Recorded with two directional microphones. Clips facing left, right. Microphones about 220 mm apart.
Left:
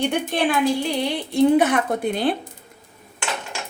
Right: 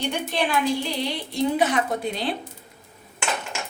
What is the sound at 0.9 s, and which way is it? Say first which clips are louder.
A woman's voice: left 6 dB; 55° left (ahead or behind).